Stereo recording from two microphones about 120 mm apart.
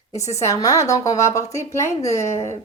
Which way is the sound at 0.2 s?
25° left (ahead or behind).